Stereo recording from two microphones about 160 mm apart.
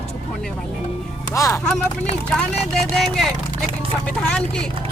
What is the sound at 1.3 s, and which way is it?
Speech, 20° left (ahead or behind).